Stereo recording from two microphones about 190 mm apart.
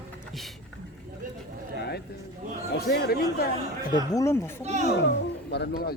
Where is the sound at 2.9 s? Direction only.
55° left (ahead or behind).